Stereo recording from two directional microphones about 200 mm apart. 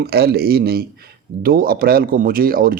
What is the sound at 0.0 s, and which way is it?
Speech, 55° right (ahead or behind).